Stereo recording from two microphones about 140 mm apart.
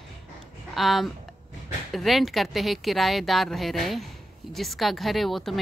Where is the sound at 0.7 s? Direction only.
Centre (ahead or behind).